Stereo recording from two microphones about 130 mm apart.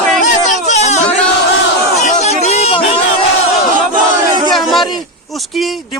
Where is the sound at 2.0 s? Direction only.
60° left (ahead or behind).